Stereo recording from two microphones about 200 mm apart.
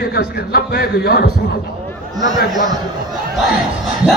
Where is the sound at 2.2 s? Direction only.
20° right (ahead or behind).